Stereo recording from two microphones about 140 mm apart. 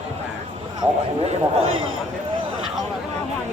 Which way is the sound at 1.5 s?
40° right (ahead or behind).